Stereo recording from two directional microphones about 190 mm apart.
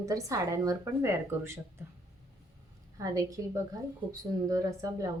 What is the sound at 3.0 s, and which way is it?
A woman's voice, 20° right (ahead or behind).